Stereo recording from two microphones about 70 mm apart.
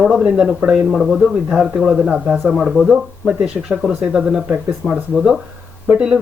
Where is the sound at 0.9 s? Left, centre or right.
Centre.